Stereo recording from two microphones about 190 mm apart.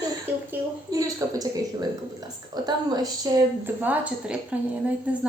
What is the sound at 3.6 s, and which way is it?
Speech, 10° right (ahead or behind).